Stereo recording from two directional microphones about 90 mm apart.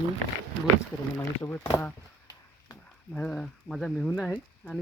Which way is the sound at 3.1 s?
10° left (ahead or behind).